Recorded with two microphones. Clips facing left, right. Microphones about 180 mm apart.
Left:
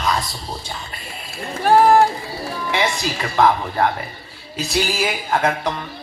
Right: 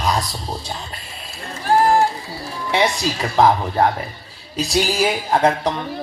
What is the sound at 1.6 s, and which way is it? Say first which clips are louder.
Run: left 3 dB; 65° left (ahead or behind).